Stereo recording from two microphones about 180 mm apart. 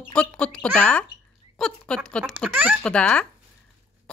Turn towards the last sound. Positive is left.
turn(degrees=5)  # may be behind; listen again after turning